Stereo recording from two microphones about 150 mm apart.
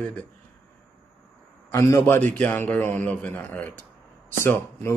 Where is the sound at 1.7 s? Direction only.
20° left (ahead or behind).